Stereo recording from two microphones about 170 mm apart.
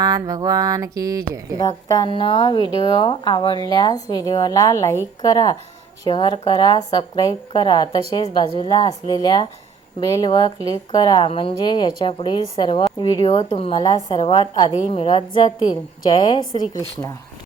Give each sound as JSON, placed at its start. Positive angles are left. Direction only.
{"t": 0.0, "sound": "mantra", "side_deg": -20}
{"t": 1.5, "sound": "a woman's voice", "side_deg": 25}
{"t": 13.2, "sound": "a woman's voice", "side_deg": 35}